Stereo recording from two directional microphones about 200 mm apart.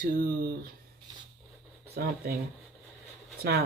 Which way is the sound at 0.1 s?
45° right (ahead or behind).